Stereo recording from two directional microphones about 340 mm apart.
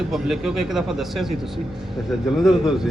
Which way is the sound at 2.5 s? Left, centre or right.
Centre.